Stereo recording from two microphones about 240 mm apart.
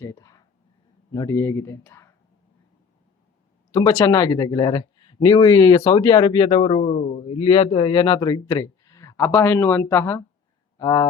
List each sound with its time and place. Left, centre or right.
0.0 s speech: centre
3.7 s speech: centre